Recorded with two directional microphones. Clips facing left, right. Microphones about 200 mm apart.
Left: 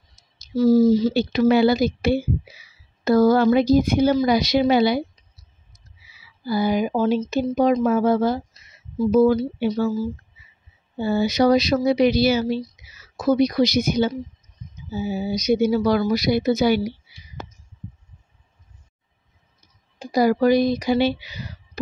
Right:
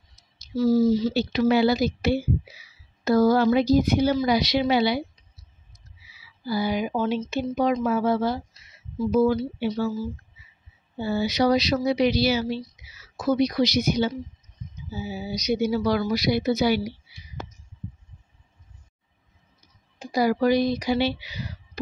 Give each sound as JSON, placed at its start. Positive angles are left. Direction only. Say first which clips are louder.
{"t": 0.1, "sound": "a woman's voice", "louder": "left 4 dB", "side_deg": 45}
{"t": 6.4, "sound": "speech", "louder": "left 4 dB", "side_deg": 50}
{"t": 11.0, "sound": "speech", "louder": "left 4 dB", "side_deg": 50}
{"t": 20.0, "sound": "speech", "louder": "left 4 dB", "side_deg": 40}